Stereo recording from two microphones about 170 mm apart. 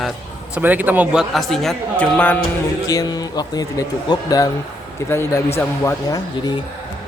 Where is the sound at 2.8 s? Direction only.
20° left (ahead or behind).